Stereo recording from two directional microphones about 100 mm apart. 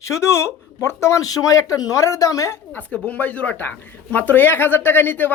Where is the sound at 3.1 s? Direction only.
15° left (ahead or behind).